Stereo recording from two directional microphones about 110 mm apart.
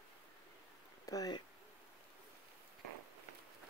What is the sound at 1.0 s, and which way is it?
Speech, 35° left (ahead or behind).